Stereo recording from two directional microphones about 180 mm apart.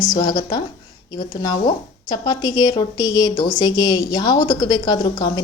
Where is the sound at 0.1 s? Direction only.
25° left (ahead or behind).